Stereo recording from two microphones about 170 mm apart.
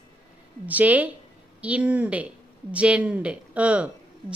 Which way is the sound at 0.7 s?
10° right (ahead or behind).